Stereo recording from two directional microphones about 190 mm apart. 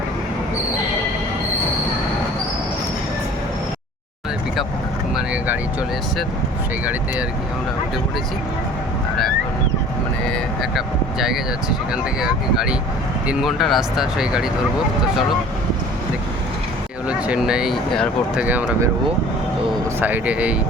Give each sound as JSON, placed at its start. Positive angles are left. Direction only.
{"t": 5.1, "sound": "vehicle", "side_deg": -5}
{"t": 10.3, "sound": "speech", "side_deg": 0}
{"t": 17.1, "sound": "speech", "side_deg": -5}
{"t": 20.0, "sound": "speech", "side_deg": -10}